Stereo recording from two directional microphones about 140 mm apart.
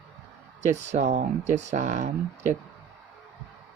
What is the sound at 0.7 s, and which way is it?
Speech, 55° right (ahead or behind).